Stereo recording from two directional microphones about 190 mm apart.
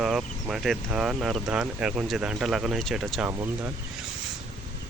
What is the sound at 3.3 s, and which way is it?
Speech, 10° right (ahead or behind).